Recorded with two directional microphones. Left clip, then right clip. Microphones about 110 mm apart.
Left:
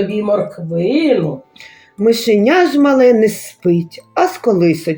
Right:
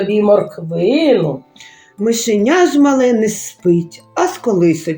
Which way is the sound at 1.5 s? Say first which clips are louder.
Left 2 dB; 45° left (ahead or behind).